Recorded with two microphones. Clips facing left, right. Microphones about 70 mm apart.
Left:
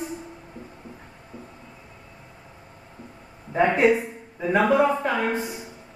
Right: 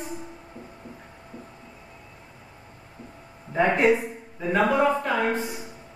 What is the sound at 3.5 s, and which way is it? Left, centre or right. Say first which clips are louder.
A woman's voice: left 1 dB; centre.